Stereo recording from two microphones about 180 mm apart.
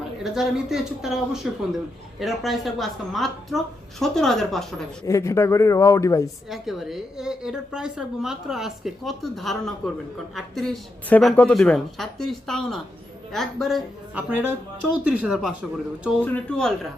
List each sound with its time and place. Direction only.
0.2 s a woman's voice: centre (ahead or behind)
5.0 s speech: 15° left (ahead or behind)
6.5 s a woman's voice: centre (ahead or behind)